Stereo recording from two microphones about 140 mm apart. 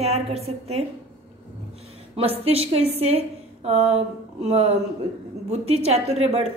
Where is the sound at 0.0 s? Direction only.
50° right (ahead or behind).